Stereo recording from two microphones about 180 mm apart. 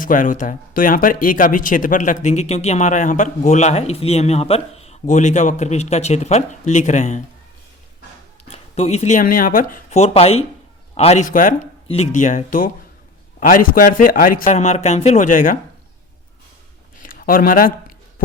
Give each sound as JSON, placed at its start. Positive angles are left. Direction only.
{"t": 0.0, "sound": "speech", "side_deg": 45}
{"t": 8.4, "sound": "speech", "side_deg": 35}
{"t": 10.0, "sound": "speech", "side_deg": 35}
{"t": 17.0, "sound": "a sound", "side_deg": 50}